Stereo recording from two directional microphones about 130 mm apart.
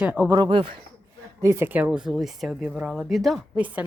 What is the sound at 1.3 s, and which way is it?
Speech, 25° right (ahead or behind).